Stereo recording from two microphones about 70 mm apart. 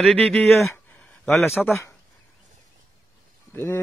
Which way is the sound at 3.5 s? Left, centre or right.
Left.